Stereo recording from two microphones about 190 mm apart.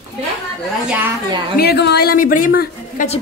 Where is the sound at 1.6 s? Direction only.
60° left (ahead or behind).